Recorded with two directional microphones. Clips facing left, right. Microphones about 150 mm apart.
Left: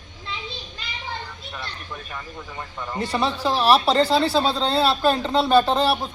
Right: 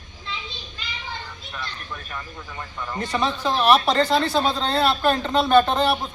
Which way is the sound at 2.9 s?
10° left (ahead or behind).